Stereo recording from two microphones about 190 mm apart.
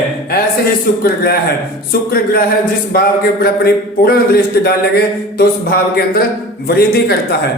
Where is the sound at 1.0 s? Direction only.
55° left (ahead or behind).